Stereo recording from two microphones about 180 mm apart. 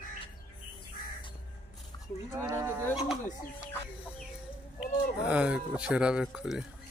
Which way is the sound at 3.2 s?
15° left (ahead or behind).